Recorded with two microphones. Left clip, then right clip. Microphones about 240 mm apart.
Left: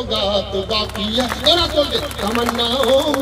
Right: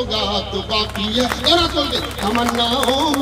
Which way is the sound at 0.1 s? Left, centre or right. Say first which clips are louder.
Left 2 dB; left.